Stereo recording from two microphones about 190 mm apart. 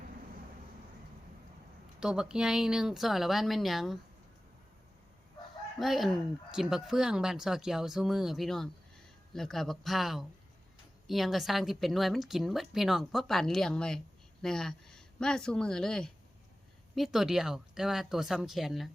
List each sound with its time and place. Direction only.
2.0 s speech: 5° right (ahead or behind)
5.8 s speech: centre (ahead or behind)